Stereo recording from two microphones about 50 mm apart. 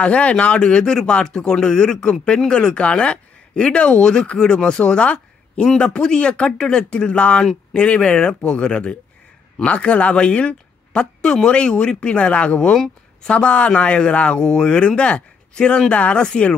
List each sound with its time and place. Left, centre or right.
0.0 s speech: left